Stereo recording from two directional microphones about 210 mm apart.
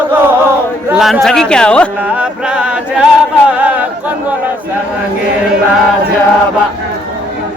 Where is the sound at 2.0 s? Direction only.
5° right (ahead or behind).